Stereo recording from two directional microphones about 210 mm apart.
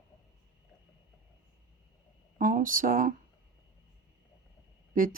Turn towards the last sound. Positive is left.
turn(degrees=-40)  # may be behind; listen again after turning